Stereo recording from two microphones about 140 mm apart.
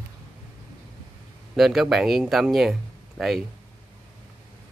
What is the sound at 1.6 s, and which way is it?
Speech, centre (ahead or behind).